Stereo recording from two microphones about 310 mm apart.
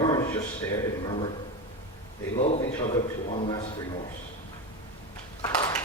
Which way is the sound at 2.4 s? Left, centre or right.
Centre.